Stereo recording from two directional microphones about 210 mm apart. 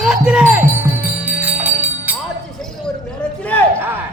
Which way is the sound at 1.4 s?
10° right (ahead or behind).